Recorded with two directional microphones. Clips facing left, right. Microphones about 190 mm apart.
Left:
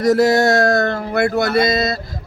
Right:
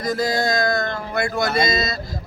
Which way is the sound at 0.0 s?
75° left (ahead or behind).